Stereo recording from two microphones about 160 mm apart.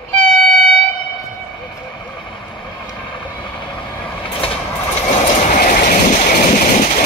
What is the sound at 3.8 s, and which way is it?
Vehicle, 30° left (ahead or behind).